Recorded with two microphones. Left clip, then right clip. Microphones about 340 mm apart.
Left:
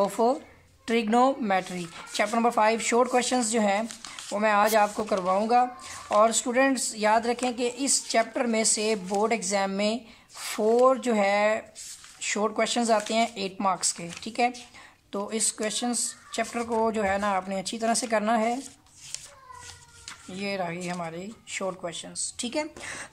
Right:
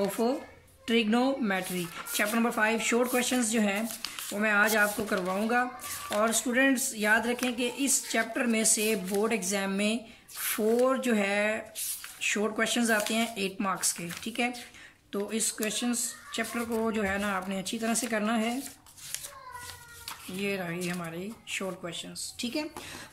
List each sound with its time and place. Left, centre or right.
0.8 s speech: centre
20.3 s speech: centre